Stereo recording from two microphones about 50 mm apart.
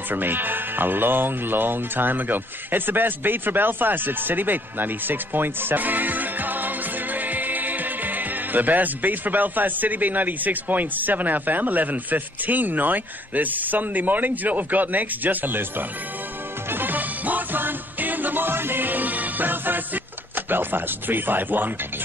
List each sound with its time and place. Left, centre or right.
0.1 s speech: right
16.7 s music: right